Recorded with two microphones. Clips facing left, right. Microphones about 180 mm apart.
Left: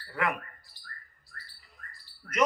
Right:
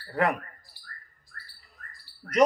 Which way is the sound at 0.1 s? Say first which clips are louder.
Right 5 dB; 40° right (ahead or behind).